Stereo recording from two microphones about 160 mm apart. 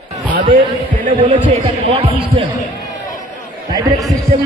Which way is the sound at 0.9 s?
60° right (ahead or behind).